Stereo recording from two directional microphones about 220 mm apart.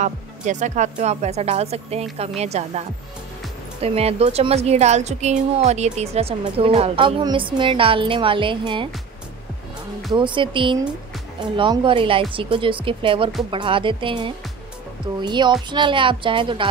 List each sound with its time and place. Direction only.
0.0 s a woman's voice: 35° right (ahead or behind)
3.8 s a woman's voice: 25° right (ahead or behind)
10.1 s a woman's voice: 20° right (ahead or behind)